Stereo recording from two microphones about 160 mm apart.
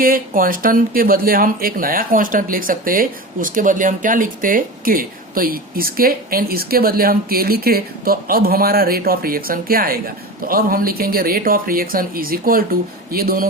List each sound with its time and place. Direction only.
0.0 s speech: 65° right (ahead or behind)